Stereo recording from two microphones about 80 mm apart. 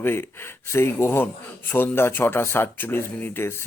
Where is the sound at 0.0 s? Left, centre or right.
Left.